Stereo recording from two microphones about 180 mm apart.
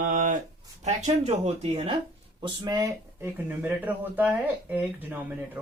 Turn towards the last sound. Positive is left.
turn(degrees=-10)  # may be behind; listen again after turning